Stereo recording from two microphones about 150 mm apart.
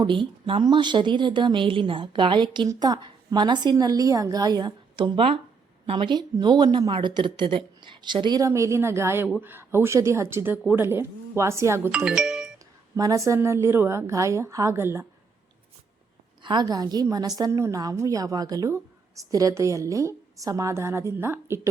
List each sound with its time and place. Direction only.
0.0 s a woman's voice: 35° right (ahead or behind)
11.9 s speech: 5° right (ahead or behind)
13.0 s a woman's voice: 20° right (ahead or behind)
16.4 s a woman's voice: 30° right (ahead or behind)